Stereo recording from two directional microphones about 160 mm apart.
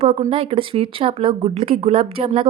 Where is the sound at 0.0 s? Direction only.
40° right (ahead or behind).